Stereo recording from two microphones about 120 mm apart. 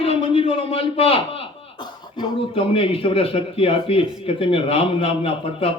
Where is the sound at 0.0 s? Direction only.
50° left (ahead or behind).